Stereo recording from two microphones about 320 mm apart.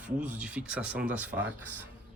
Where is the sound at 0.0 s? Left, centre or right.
Centre.